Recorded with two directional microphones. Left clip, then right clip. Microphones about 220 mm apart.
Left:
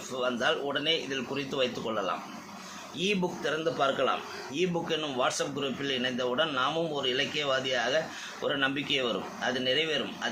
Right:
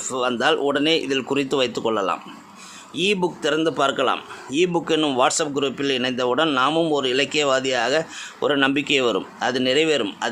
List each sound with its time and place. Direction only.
0.2 s a man's voice: 50° right (ahead or behind)